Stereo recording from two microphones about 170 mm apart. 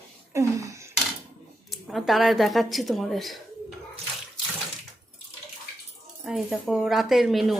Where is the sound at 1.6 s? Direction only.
Centre (ahead or behind).